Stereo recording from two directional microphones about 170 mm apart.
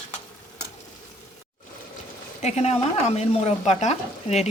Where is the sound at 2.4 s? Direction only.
40° left (ahead or behind).